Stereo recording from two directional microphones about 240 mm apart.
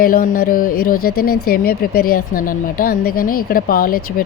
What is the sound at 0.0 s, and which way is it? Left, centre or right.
Speech, left.